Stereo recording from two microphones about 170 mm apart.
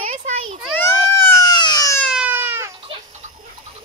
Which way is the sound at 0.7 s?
15° left (ahead or behind).